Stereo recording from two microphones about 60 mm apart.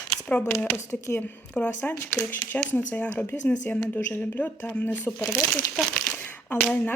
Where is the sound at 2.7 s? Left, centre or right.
Left.